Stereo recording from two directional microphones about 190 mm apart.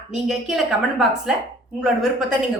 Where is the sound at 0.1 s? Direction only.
Centre (ahead or behind).